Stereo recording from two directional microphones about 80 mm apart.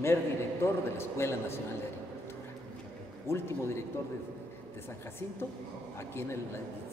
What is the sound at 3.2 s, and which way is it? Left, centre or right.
Speech, left.